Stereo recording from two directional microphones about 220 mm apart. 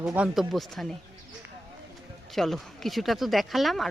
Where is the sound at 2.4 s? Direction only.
Centre (ahead or behind).